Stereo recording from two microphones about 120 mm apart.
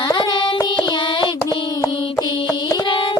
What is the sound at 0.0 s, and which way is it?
Child singing, 40° left (ahead or behind).